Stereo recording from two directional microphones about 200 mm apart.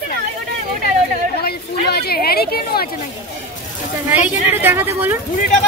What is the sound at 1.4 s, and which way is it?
A woman's voice, 50° left (ahead or behind).